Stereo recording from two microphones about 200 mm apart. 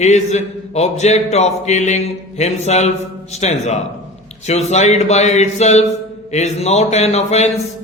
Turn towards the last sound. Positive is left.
turn(degrees=35)  # may be behind; listen again after turning